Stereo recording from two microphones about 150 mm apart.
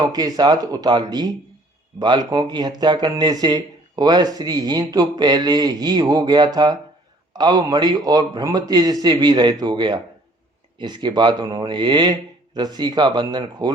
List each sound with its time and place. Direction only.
0.0 s speech: 25° right (ahead or behind)